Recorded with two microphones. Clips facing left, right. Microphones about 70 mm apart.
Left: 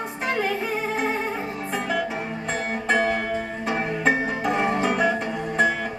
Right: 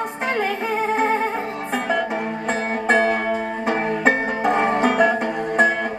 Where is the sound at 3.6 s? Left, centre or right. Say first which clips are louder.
Right 4 dB; right.